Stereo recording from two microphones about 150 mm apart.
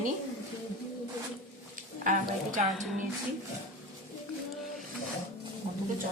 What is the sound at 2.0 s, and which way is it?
Speech, 60° right (ahead or behind).